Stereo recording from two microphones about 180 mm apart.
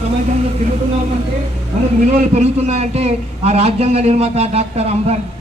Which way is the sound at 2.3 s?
35° right (ahead or behind).